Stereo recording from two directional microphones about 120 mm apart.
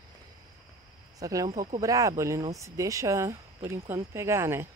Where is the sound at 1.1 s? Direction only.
30° right (ahead or behind).